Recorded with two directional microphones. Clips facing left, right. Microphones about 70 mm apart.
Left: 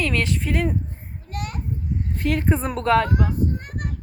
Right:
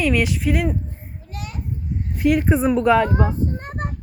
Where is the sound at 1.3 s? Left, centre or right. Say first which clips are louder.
Left 3 dB; left.